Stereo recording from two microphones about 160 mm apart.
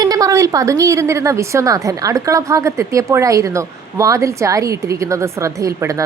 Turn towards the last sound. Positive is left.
turn(degrees=-20)  # may be behind; listen again after turning